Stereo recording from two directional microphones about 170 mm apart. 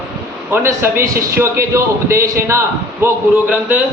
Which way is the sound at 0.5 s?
15° right (ahead or behind).